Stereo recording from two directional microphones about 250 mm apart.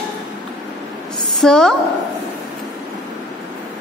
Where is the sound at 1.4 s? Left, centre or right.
Centre.